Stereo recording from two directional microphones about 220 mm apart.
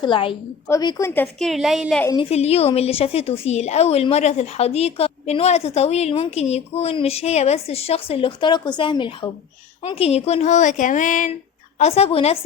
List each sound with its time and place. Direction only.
0.0 s a woman's voice: 25° left (ahead or behind); by 2.0 s centre (ahead or behind)
2.3 s a woman's voice: 30° left (ahead or behind)